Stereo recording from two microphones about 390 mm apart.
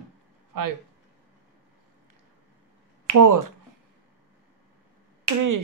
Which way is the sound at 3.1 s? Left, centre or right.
Right.